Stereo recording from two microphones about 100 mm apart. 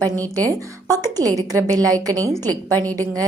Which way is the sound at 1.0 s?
40° right (ahead or behind).